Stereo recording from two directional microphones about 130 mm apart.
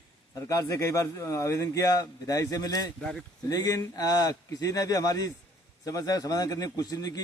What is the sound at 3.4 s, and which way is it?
A man's voice, 30° left (ahead or behind).